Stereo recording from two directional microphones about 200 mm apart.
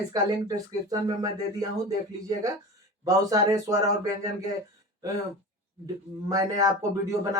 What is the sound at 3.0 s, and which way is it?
Speech, 15° right (ahead or behind).